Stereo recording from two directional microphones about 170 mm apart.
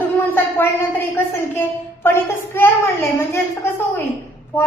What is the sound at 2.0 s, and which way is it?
A woman's voice, 15° left (ahead or behind).